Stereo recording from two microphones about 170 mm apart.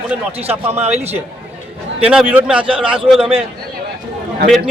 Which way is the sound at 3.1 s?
30° right (ahead or behind).